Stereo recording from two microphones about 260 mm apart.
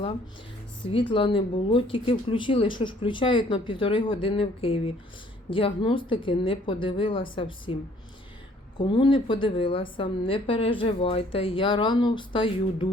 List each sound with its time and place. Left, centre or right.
1.1 s a woman's voice: centre
8.8 s a woman's voice: centre